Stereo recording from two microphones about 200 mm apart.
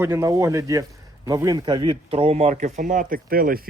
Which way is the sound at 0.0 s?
15° right (ahead or behind).